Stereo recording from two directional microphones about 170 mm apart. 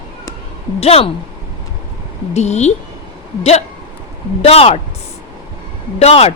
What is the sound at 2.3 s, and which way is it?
Speech, 40° left (ahead or behind).